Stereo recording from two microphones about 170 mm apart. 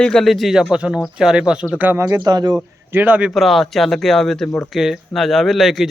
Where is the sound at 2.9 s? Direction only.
10° right (ahead or behind).